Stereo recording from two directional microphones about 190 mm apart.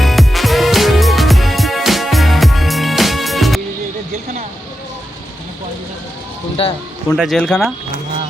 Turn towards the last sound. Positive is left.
turn(degrees=5)  # may be behind; listen again after turning